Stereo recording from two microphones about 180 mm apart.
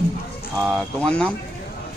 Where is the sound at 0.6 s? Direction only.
5° right (ahead or behind).